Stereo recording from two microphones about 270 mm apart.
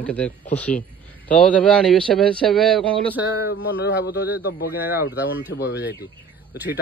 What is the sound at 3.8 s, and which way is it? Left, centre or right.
Speech, left.